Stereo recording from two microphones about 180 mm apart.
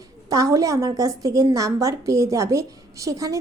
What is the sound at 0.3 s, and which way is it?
A woman's voice, 20° right (ahead or behind).